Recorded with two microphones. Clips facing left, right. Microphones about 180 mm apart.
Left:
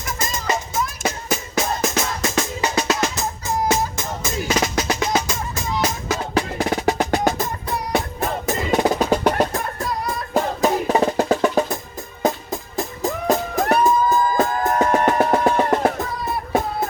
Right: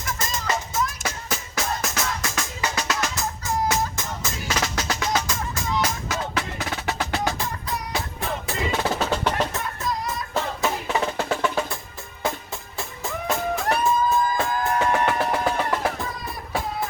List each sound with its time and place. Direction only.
0.2 s music: 15° left (ahead or behind)
6.1 s music: 35° left (ahead or behind)
7.0 s music: 20° left (ahead or behind)
7.3 s music: 50° left (ahead or behind)
8.8 s percussion: 15° left (ahead or behind)
9.4 s music: 35° left (ahead or behind)
9.6 s music: 60° left (ahead or behind)
10.3 s music: 40° left (ahead or behind)